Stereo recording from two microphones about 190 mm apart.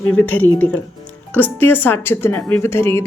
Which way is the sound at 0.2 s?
10° left (ahead or behind).